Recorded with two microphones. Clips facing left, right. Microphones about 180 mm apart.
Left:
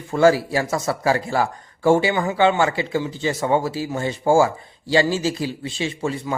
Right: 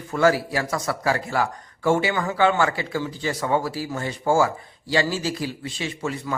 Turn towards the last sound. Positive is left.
turn(degrees=25)  # may be behind; listen again after turning